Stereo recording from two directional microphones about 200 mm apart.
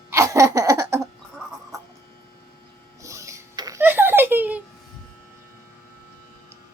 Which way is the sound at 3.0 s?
15° right (ahead or behind).